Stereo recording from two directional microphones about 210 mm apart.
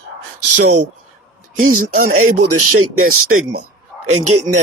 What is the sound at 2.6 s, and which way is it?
Speech, 90° right.